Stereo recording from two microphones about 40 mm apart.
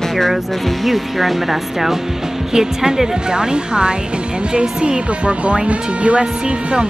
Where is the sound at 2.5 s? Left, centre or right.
Centre.